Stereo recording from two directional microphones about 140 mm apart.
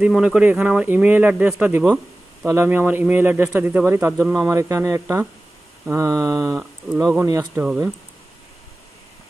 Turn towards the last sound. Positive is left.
turn(degrees=-25)  # may be behind; listen again after turning